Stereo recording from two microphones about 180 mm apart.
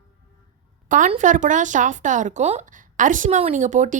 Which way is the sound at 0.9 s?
45° right (ahead or behind).